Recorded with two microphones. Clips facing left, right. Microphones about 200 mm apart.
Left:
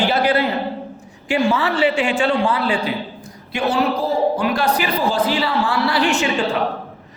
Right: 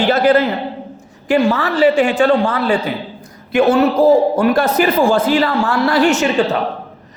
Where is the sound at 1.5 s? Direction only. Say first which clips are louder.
Right 5 dB; 40° right (ahead or behind).